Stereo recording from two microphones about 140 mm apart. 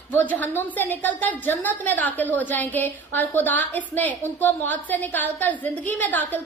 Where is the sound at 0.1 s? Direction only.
10° left (ahead or behind).